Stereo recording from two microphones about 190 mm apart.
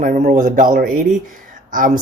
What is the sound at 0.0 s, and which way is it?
Speech, 45° right (ahead or behind).